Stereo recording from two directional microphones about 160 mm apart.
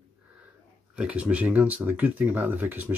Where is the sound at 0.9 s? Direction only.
5° right (ahead or behind).